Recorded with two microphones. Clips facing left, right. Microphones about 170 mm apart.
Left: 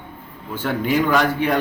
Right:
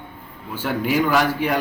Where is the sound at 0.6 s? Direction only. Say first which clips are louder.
Left 1 dB; 5° right (ahead or behind).